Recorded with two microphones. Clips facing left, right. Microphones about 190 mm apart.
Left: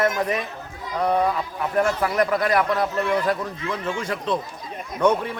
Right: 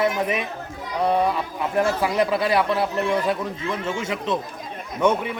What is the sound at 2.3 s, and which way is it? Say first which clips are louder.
Speech: even; 25° right (ahead or behind).